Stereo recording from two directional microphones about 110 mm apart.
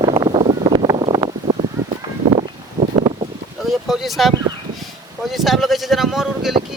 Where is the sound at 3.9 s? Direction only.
Centre (ahead or behind).